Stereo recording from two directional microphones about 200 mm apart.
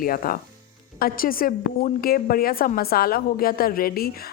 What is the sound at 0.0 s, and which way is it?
A woman's voice, 45° left (ahead or behind).